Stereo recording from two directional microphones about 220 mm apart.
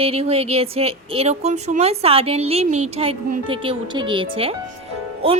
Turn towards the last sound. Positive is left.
turn(degrees=-25)  # may be behind; listen again after turning